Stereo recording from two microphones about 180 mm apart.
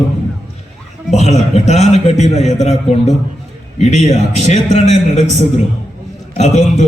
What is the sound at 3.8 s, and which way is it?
A man's voice, 40° left (ahead or behind).